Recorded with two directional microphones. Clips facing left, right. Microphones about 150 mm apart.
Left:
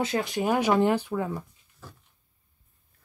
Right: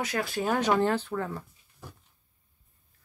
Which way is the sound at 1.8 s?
15° right (ahead or behind).